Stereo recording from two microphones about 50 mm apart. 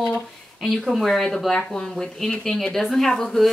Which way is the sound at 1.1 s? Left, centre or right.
Centre.